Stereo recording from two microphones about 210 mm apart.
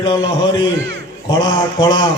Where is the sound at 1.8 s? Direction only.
20° left (ahead or behind).